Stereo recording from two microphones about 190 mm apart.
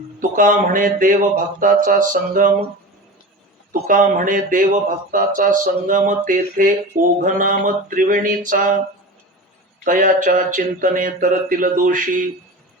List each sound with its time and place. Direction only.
0.2 s speech: 45° right (ahead or behind)
3.7 s speech: 45° right (ahead or behind)
9.8 s speech: 45° right (ahead or behind)